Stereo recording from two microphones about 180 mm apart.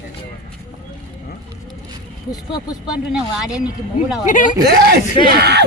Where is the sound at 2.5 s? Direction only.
25° left (ahead or behind).